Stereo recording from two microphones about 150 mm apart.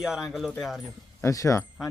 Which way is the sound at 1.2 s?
20° left (ahead or behind).